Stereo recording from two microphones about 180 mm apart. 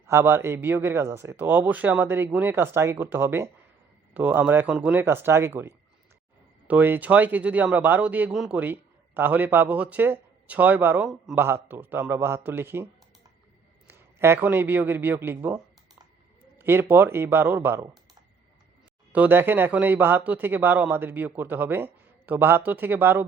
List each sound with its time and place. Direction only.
0.1 s a man's voice: 15° right (ahead or behind)
16.6 s a sound: 10° right (ahead or behind)
16.9 s a man's voice: 10° right (ahead or behind)